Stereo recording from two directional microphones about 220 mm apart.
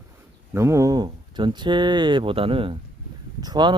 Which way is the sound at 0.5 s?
15° right (ahead or behind).